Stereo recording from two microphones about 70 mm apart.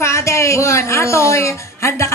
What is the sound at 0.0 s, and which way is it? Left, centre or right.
Speech, left.